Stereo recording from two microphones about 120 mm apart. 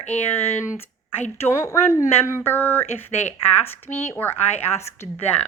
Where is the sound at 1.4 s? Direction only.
20° left (ahead or behind).